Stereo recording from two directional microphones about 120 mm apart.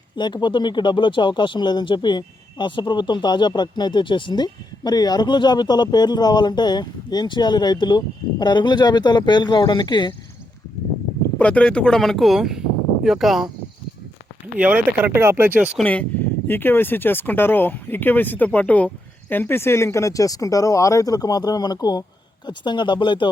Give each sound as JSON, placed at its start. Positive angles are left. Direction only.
{"t": 0.2, "sound": "speech", "side_deg": 40}
{"t": 11.3, "sound": "speech", "side_deg": 10}
{"t": 14.6, "sound": "speech", "side_deg": -15}
{"t": 15.8, "sound": "speech", "side_deg": 10}